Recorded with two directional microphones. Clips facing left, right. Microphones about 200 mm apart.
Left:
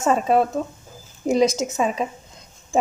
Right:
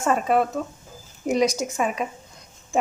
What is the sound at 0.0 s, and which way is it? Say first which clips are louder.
A woman's voice: left 2 dB; 30° left (ahead or behind).